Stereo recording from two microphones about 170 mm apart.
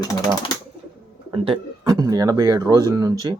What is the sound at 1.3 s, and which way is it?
Speech, 25° right (ahead or behind).